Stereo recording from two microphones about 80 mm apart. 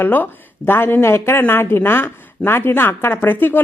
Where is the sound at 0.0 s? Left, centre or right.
Left.